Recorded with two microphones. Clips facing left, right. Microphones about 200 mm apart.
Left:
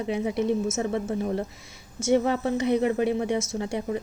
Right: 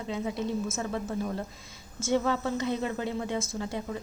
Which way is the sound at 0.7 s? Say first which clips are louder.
Left 6 dB; 20° left (ahead or behind).